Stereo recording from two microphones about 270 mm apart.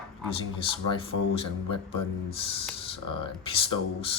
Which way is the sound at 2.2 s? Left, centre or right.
Left.